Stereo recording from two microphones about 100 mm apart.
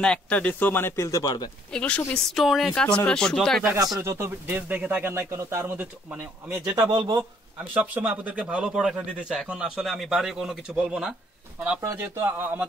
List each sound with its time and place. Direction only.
0.0 s speech: 10° left (ahead or behind); by 1.5 s 40° left (ahead or behind)
1.7 s speech: 10° left (ahead or behind)
2.3 s a man's voice: centre (ahead or behind)
4.0 s speech: 25° right (ahead or behind)
6.7 s speech: 45° right (ahead or behind)
7.7 s a man's voice: 15° right (ahead or behind)
11.8 s speech: 20° right (ahead or behind)